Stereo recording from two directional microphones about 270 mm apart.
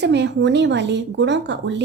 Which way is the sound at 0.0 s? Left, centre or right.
Right.